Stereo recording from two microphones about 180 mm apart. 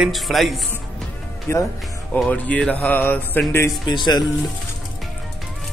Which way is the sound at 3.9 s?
25° left (ahead or behind).